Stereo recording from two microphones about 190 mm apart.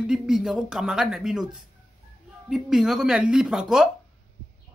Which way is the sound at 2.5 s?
Centre (ahead or behind).